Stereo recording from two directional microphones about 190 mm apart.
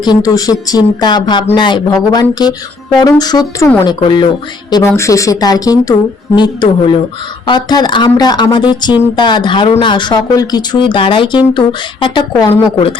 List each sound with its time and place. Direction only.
0.0 s a woman's voice: 20° left (ahead or behind)